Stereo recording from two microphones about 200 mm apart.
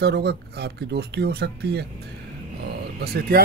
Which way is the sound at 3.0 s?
50° right (ahead or behind).